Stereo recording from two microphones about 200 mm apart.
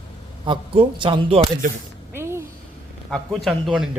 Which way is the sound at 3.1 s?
Centre (ahead or behind).